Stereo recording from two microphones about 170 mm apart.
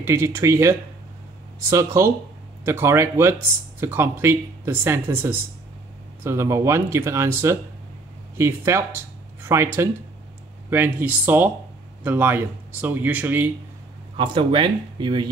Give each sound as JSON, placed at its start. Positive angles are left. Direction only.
{"t": 0.0, "sound": "speech", "side_deg": -15}
{"t": 14.1, "sound": "speech", "side_deg": -30}